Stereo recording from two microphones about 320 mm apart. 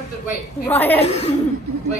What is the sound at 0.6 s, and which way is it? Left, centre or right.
Speech, centre.